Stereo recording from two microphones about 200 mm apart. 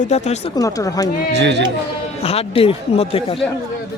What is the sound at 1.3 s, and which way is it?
Speech, 60° right (ahead or behind).